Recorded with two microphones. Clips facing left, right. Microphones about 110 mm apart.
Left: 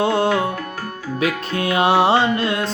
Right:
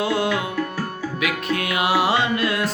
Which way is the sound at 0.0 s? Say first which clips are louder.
Left 4 dB; 30° left (ahead or behind).